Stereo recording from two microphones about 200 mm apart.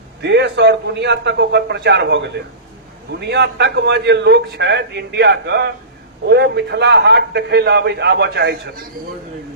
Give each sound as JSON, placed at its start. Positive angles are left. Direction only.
{"t": 0.2, "sound": "a man's voice", "side_deg": -60}